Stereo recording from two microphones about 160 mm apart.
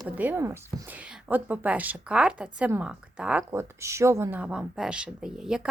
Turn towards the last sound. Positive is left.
turn(degrees=-5)  # may be behind; listen again after turning